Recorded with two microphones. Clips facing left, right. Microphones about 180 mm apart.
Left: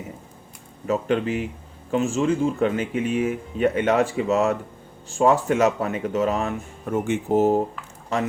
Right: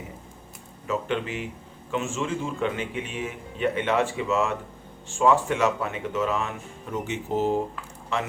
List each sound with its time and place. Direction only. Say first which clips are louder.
0.9 s speech: left 5 dB; 40° left (ahead or behind)